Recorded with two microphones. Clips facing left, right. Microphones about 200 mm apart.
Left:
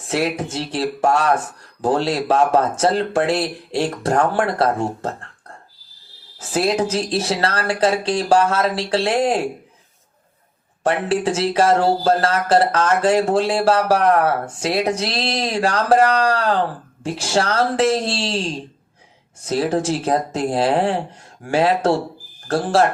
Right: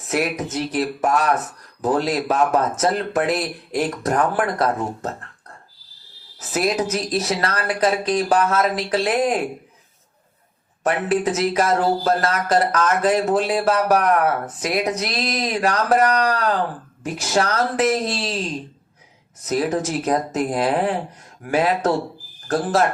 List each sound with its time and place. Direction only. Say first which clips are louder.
0.0 s speech: left 1 dB; 30° left (ahead or behind)
6.4 s speech: left 2 dB; 30° left (ahead or behind)
10.8 s speech: left 1 dB; 30° left (ahead or behind)